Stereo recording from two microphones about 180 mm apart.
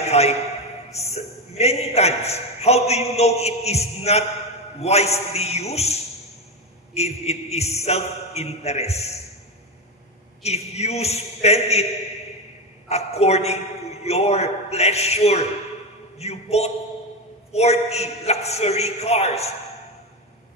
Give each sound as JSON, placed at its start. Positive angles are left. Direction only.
{"t": 0.1, "sound": "a man's voice", "side_deg": 35}
{"t": 10.4, "sound": "a man's voice", "side_deg": 35}
{"t": 12.8, "sound": "a man's voice", "side_deg": 35}